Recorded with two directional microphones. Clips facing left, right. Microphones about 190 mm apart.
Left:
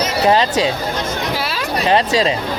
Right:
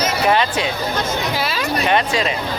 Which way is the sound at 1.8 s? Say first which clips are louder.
Left 5 dB; 35° left (ahead or behind).